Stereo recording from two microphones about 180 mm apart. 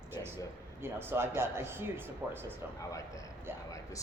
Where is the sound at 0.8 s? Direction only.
10° right (ahead or behind).